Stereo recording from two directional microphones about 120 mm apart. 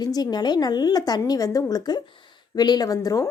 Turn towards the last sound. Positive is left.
turn(degrees=30)  # may be behind; listen again after turning